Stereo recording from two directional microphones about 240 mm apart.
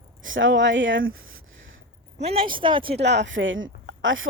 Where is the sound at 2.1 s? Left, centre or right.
Right.